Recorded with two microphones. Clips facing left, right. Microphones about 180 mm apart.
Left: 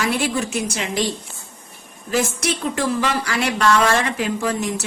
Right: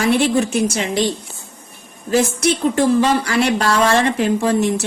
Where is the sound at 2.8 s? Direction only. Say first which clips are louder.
Right 7 dB; 30° right (ahead or behind).